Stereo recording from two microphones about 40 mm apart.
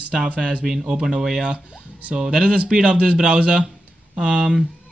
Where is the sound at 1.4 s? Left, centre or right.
Centre.